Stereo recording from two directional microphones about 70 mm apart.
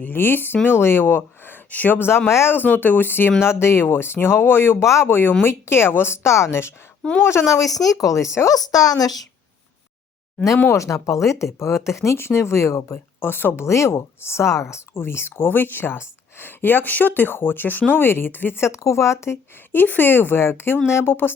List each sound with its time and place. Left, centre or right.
0.0 s speech: left
8.5 s a woman's voice: left
10.7 s speech: left
13.1 s speech: left
13.7 s speech: left
19.7 s speech: left